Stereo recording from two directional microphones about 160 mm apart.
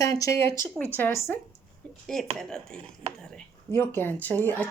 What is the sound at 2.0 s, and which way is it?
Speech, 5° left (ahead or behind).